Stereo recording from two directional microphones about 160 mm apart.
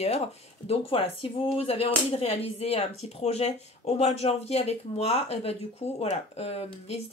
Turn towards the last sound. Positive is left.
turn(degrees=40)  # may be behind; listen again after turning